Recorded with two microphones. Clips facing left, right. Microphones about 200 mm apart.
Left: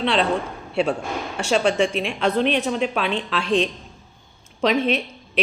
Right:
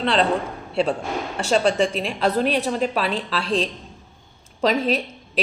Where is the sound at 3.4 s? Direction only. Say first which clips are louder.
Left 3 dB; 35° right (ahead or behind).